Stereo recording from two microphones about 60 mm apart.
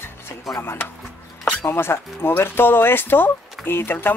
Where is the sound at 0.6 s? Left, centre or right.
Left.